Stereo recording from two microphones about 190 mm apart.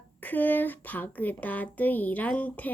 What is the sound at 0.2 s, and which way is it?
Speech, 10° left (ahead or behind).